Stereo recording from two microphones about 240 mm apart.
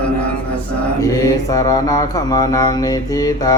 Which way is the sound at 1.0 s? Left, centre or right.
Centre.